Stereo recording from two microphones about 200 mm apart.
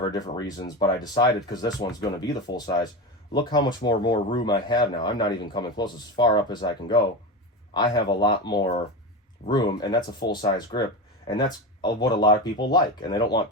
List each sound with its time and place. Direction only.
0.0 s speech: 20° left (ahead or behind)